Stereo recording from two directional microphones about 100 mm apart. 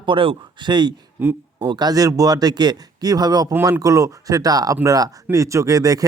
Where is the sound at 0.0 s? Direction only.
60° right (ahead or behind).